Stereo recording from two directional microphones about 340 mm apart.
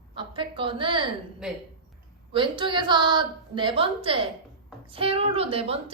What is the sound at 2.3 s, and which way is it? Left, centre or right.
Speech, centre.